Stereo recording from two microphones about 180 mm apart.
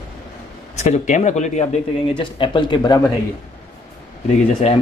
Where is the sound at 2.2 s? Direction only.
25° left (ahead or behind).